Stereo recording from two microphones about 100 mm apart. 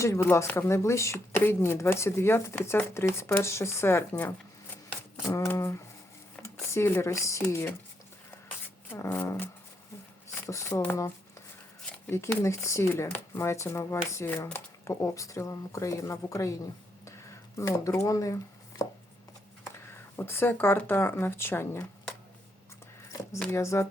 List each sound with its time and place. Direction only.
0.0 s speech: 25° left (ahead or behind)
5.2 s speech: 30° left (ahead or behind)
8.9 s speech: 25° left (ahead or behind)
10.5 s speech: 30° left (ahead or behind)
12.4 s speech: 30° left (ahead or behind)
17.6 s speech: 30° left (ahead or behind)
20.1 s speech: 20° left (ahead or behind)
23.6 s speech: 30° left (ahead or behind)